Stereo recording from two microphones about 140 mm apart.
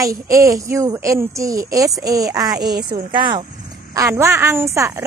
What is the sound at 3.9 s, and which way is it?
A woman's voice, 20° right (ahead or behind).